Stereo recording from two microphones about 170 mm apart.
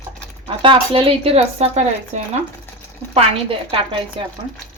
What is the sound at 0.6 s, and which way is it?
Speech, 30° right (ahead or behind).